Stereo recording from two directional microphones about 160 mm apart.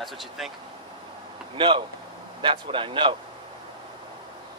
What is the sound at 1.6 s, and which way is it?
A man's voice, 30° right (ahead or behind).